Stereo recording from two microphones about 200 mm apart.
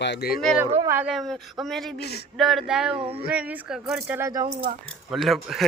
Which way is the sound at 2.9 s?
25° right (ahead or behind).